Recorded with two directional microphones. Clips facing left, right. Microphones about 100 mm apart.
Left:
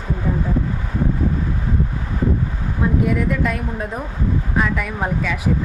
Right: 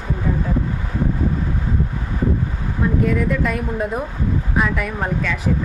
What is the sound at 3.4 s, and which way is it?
Speech, centre (ahead or behind).